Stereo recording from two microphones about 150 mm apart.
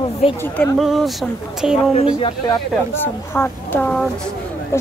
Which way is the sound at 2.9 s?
15° left (ahead or behind).